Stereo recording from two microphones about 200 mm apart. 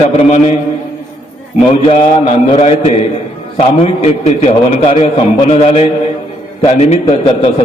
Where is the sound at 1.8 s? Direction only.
30° left (ahead or behind).